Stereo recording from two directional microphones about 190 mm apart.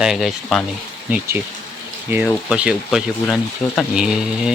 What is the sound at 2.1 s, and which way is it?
Speech, 5° right (ahead or behind).